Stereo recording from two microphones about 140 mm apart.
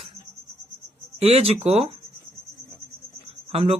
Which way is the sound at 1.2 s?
45° right (ahead or behind).